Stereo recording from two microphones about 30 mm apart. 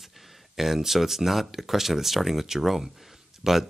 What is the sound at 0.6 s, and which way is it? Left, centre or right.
Speech, centre.